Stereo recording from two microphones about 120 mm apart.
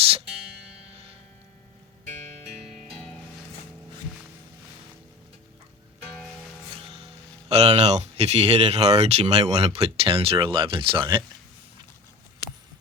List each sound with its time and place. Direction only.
2.6 s music: centre (ahead or behind)
7.5 s speech: 60° right (ahead or behind); by 11.2 s 40° right (ahead or behind)